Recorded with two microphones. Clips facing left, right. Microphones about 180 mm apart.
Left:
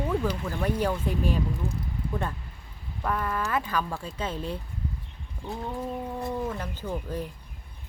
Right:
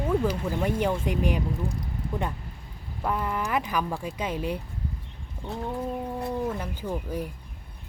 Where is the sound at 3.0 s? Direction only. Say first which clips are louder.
Right 1 dB; 15° right (ahead or behind).